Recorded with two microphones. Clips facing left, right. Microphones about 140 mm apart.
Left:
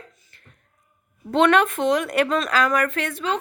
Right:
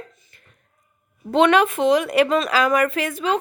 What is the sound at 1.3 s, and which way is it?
Speech, centre (ahead or behind).